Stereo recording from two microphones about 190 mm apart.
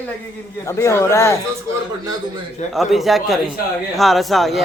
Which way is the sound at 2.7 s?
Centre (ahead or behind).